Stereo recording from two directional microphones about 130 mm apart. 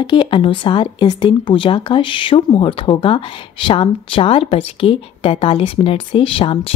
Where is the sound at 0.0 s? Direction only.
40° left (ahead or behind).